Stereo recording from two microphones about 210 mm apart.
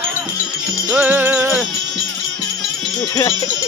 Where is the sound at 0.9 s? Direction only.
5° right (ahead or behind).